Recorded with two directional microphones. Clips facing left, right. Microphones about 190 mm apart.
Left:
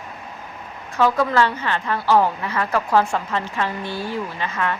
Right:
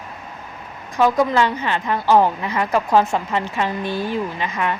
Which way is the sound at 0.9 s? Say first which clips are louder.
Right 2 dB; 15° right (ahead or behind).